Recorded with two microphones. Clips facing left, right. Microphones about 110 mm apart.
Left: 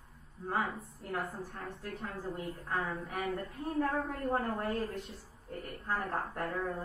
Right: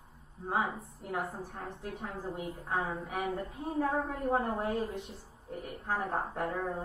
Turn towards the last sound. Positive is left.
turn(degrees=-20)  # may be behind; listen again after turning